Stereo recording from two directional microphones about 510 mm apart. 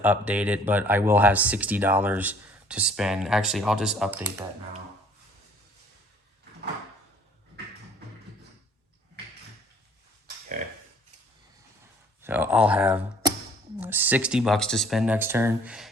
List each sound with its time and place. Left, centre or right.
0.0 s speech: centre
12.2 s speech: centre